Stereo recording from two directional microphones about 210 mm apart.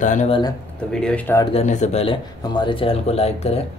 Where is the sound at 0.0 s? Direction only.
35° left (ahead or behind).